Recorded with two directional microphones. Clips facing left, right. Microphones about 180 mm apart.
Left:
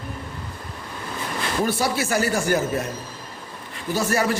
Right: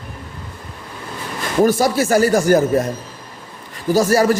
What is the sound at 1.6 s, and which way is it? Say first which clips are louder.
A man's voice: right 9 dB; 40° right (ahead or behind).